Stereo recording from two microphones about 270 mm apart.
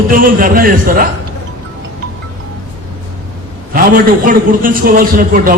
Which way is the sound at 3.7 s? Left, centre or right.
Right.